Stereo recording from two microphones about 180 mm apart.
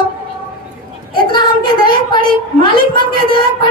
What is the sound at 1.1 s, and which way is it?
Speech, 25° left (ahead or behind).